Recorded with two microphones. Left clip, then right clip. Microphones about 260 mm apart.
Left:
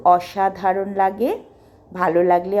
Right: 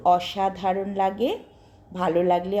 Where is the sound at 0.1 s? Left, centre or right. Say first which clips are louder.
Left 4 dB; left.